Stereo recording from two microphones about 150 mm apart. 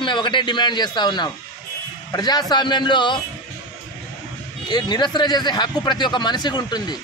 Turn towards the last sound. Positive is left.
turn(degrees=30)  # may be behind; listen again after turning